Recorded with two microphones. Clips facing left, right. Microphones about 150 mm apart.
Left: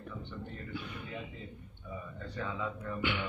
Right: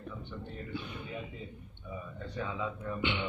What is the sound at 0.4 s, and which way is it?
Speech, 25° right (ahead or behind).